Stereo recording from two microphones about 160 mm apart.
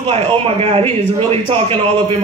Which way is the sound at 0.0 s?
35° right (ahead or behind).